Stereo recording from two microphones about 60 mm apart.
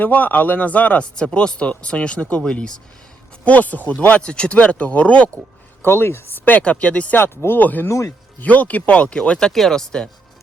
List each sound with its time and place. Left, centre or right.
0.0 s speech: left
3.4 s speech: left
5.8 s speech: left
6.7 s speech: centre
7.2 s speech: left
7.9 s speech: left
8.4 s speech: left; by 10.1 s centre